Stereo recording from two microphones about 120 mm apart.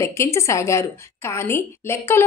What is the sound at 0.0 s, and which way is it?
Speech, 25° left (ahead or behind).